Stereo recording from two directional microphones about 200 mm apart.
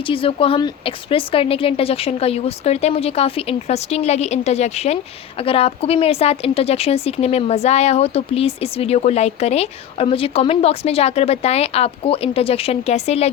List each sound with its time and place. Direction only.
0.0 s a woman's voice: 25° left (ahead or behind)